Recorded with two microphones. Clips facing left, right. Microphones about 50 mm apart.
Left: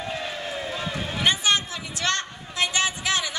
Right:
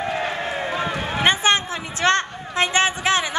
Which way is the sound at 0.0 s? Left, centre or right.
Right.